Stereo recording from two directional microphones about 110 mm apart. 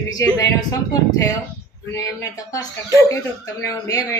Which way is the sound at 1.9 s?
30° left (ahead or behind).